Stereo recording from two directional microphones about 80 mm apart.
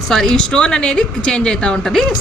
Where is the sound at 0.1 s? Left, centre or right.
Centre.